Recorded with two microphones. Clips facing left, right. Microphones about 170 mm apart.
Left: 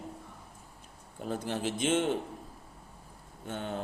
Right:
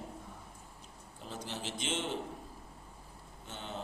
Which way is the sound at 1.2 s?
50° left (ahead or behind).